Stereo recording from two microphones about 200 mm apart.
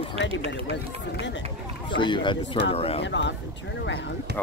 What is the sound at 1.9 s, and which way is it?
Speech, 25° left (ahead or behind).